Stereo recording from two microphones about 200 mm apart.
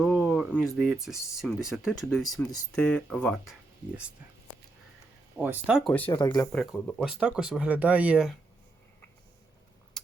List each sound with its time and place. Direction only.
0.0 s speech: centre (ahead or behind)
5.4 s speech: 5° right (ahead or behind)
6.1 s speech: 25° left (ahead or behind)
6.5 s speech: 5° left (ahead or behind)